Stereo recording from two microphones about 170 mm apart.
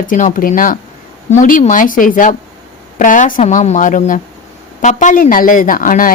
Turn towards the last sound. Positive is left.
turn(degrees=55)  # may be behind; listen again after turning